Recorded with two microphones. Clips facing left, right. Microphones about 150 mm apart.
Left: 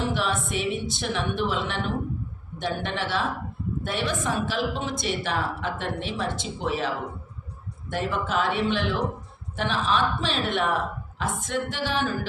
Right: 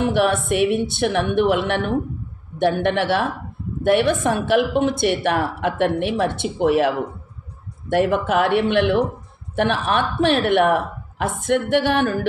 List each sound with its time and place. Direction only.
0.0 s a woman's voice: 65° right (ahead or behind)
7.9 s a woman's voice: 65° right (ahead or behind)